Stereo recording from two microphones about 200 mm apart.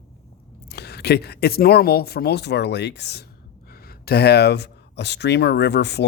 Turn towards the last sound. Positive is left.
turn(degrees=60)  # may be behind; listen again after turning